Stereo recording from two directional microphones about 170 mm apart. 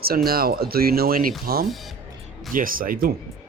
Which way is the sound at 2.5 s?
55° right (ahead or behind).